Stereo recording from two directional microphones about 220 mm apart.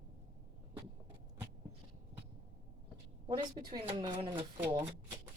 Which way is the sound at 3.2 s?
20° right (ahead or behind).